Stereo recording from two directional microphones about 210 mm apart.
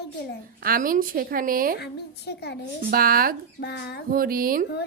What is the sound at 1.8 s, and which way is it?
Speech, 50° left (ahead or behind).